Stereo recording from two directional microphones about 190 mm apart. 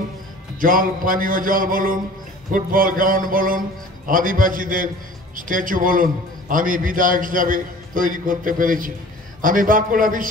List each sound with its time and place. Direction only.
0.6 s a man's voice: 45° right (ahead or behind)